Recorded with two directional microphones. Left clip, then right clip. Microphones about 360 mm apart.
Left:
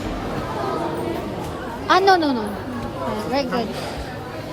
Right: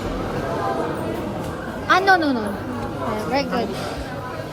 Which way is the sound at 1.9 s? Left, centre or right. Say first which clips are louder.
Left 1 dB; centre.